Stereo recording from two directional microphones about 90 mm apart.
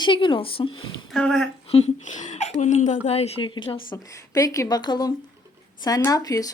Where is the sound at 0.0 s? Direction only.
70° left (ahead or behind); by 0.8 s 85° left.